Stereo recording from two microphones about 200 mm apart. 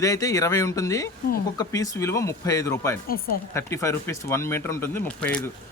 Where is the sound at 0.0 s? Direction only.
15° left (ahead or behind).